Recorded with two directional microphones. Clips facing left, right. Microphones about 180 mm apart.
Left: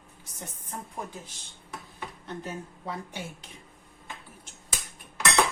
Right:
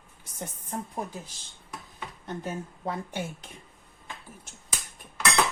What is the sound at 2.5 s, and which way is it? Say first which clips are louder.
Speech: right 5 dB; 50° right (ahead or behind).